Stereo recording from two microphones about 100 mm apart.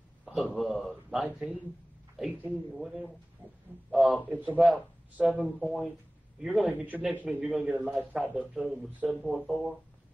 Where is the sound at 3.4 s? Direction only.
20° right (ahead or behind).